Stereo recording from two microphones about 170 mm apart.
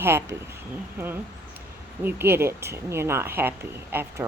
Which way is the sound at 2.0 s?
10° right (ahead or behind).